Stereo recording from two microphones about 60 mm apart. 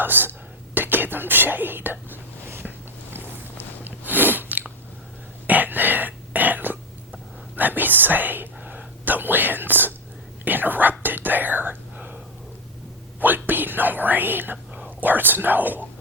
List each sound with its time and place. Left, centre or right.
0.0 s whispering: right
3.8 s biting: right
5.5 s a sound: right
7.5 s whispering: right
10.4 s speech: right
11.0 s whispering: right
14.7 s speech: right